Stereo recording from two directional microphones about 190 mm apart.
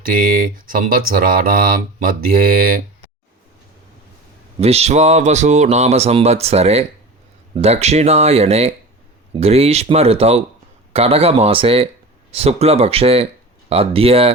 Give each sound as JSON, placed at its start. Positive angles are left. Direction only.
{"t": 0.0, "sound": "speech", "side_deg": -50}
{"t": 4.6, "sound": "speech", "side_deg": -35}